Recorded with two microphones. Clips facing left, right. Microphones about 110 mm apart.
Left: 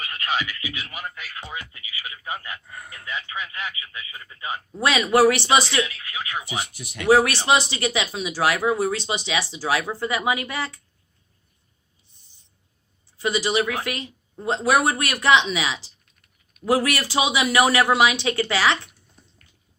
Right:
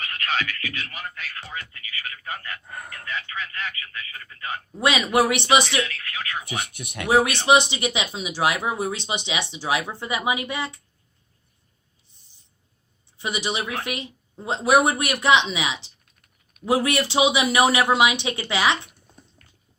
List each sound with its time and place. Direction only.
0.0 s speech: 10° left (ahead or behind)
2.6 s speech: 55° right (ahead or behind)
3.1 s speech: 15° left (ahead or behind)
4.8 s speech: 20° right (ahead or behind)
5.8 s speech: 15° left (ahead or behind)
6.7 s speech: 55° right (ahead or behind)
7.1 s speech: 20° right (ahead or behind)
13.1 s speech: 20° right (ahead or behind)